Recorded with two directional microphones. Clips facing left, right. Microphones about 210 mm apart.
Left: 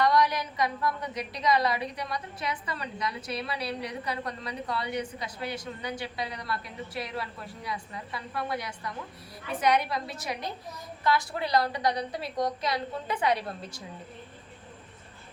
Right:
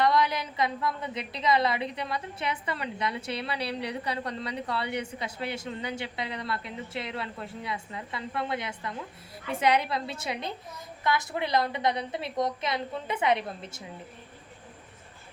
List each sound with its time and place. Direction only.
0.0 s a woman's voice: 25° right (ahead or behind)